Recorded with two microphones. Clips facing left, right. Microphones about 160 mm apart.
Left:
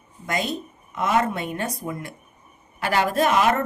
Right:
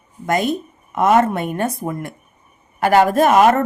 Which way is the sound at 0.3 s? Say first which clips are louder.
Right 8 dB; 50° right (ahead or behind).